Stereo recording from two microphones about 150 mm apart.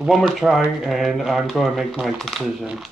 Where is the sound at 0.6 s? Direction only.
5° right (ahead or behind).